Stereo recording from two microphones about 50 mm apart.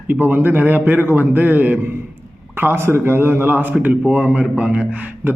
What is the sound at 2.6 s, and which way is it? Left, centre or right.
Speech, right.